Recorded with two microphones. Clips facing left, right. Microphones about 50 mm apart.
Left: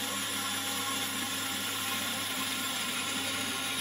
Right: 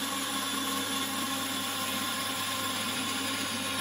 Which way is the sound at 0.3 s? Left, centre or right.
Centre.